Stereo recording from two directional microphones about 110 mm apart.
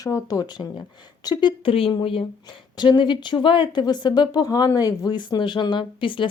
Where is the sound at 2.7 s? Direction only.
45° left (ahead or behind).